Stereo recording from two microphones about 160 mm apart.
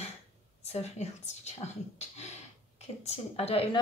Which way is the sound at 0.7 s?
45° left (ahead or behind).